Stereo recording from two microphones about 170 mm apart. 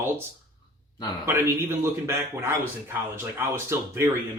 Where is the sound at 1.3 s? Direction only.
15° right (ahead or behind).